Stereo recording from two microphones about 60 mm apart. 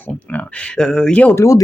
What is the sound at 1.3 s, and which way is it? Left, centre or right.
Speech, left.